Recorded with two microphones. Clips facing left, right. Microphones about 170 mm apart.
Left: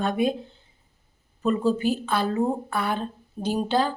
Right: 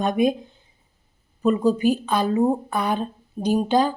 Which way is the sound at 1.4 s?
15° right (ahead or behind).